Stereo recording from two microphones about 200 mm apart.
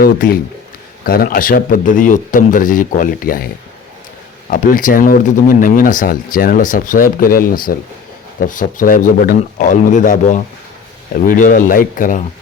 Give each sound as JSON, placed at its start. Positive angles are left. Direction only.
{"t": 0.0, "sound": "speech", "side_deg": 50}